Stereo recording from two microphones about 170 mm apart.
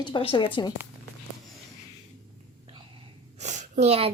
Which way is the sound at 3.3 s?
45° right (ahead or behind).